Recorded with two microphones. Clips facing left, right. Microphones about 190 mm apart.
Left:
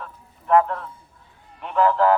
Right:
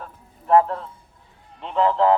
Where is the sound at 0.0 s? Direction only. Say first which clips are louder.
Even; 30° right (ahead or behind).